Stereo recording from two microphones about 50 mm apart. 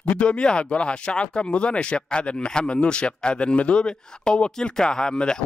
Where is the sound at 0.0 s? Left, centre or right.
Left.